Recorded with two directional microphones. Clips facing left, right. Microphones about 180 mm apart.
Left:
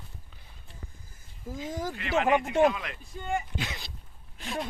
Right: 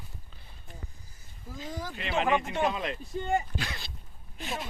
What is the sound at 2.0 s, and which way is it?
Speech, 20° right (ahead or behind).